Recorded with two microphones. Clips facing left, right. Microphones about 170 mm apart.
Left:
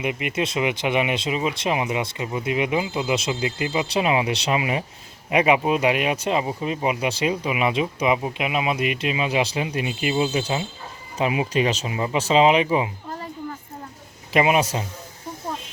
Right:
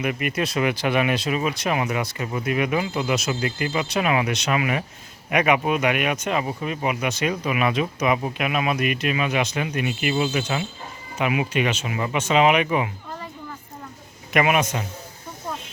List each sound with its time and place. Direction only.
0.0 s speech: 20° left (ahead or behind)
14.3 s speech: 25° left (ahead or behind)